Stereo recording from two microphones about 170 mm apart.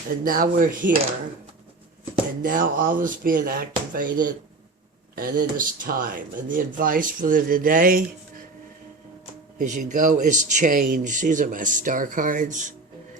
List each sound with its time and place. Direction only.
0.3 s speech: 55° right (ahead or behind)
2.4 s speech: 55° right (ahead or behind)
9.6 s speech: 50° right (ahead or behind)